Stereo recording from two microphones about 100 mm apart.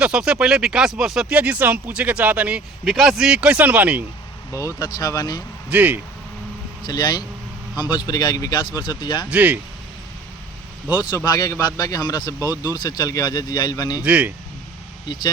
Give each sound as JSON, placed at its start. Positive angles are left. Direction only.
{"t": 0.0, "sound": "speech", "side_deg": -5}
{"t": 2.8, "sound": "speech", "side_deg": -5}
{"t": 4.5, "sound": "speech", "side_deg": 35}
{"t": 5.7, "sound": "speech", "side_deg": -15}
{"t": 6.8, "sound": "speech", "side_deg": 45}
{"t": 9.3, "sound": "speech", "side_deg": -15}
{"t": 11.2, "sound": "speech", "side_deg": 35}
{"t": 14.0, "sound": "speech", "side_deg": -15}
{"t": 15.0, "sound": "speech", "side_deg": 50}